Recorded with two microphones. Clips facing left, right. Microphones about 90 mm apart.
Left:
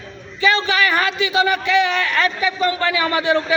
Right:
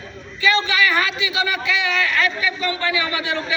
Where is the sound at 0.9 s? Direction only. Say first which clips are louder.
Left 2 dB; 45° left (ahead or behind).